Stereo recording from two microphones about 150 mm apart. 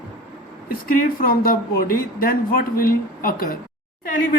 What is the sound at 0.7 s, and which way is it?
Speech, 75° left (ahead or behind).